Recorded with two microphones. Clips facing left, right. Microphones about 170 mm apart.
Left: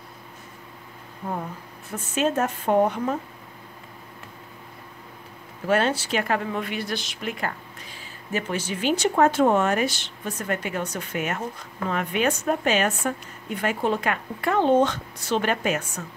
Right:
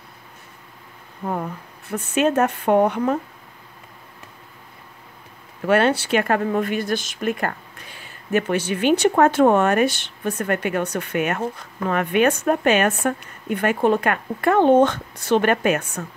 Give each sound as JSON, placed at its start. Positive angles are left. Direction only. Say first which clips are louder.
{"t": 1.9, "sound": "speech", "louder": "right 5 dB", "side_deg": -65}
{"t": 5.7, "sound": "speech", "louder": "right 5 dB", "side_deg": -65}